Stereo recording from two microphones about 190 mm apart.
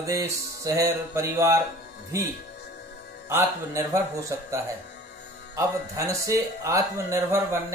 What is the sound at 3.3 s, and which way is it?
Speech, 15° right (ahead or behind).